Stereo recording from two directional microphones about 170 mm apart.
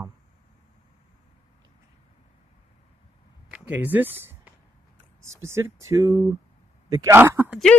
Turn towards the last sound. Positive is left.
turn(degrees=-10)  # may be behind; listen again after turning